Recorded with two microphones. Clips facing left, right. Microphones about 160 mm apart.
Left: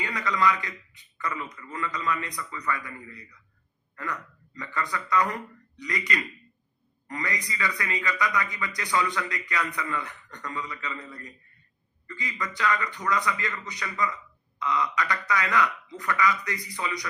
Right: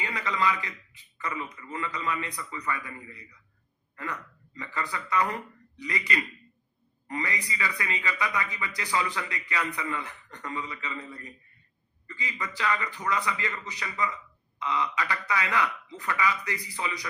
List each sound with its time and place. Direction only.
0.0 s a man's voice: 30° right (ahead or behind)
12.0 s speech: 25° right (ahead or behind)